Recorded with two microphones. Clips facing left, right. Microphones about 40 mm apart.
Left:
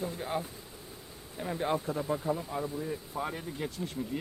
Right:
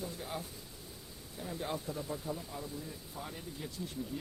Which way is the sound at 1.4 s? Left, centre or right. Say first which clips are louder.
Left 8 dB; left.